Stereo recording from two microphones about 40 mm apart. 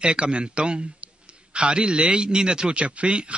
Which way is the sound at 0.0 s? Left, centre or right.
Right.